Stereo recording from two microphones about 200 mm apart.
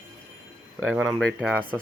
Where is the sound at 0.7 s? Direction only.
10° right (ahead or behind).